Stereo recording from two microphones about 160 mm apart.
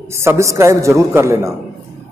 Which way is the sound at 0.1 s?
15° right (ahead or behind).